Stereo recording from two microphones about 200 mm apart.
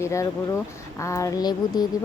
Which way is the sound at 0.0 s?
15° left (ahead or behind).